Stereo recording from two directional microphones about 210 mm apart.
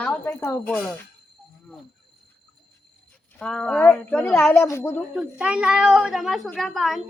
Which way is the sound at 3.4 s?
5° left (ahead or behind).